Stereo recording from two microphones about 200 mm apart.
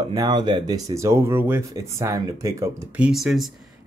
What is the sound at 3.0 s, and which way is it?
Speech, centre (ahead or behind).